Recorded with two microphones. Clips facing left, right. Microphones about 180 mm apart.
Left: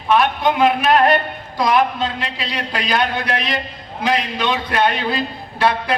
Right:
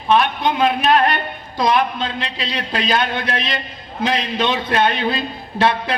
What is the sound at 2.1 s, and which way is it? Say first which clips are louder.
A man's voice: even; 25° right (ahead or behind).